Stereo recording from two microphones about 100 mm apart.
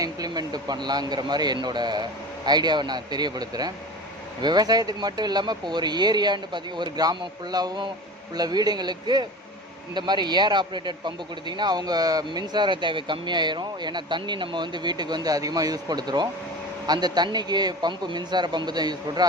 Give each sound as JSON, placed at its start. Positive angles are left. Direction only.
{"t": 0.0, "sound": "speech", "side_deg": -40}